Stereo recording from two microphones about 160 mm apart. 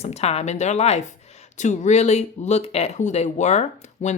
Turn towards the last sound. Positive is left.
turn(degrees=45)  # may be behind; listen again after turning